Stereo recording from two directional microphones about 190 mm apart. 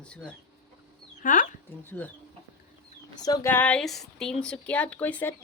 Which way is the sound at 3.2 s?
15° left (ahead or behind).